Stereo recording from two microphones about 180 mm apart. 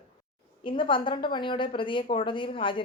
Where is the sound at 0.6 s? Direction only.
30° left (ahead or behind).